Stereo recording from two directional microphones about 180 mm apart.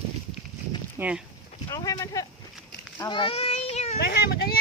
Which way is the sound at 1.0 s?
15° right (ahead or behind).